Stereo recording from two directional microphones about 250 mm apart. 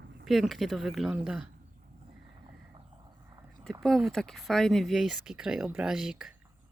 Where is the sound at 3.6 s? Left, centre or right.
Centre.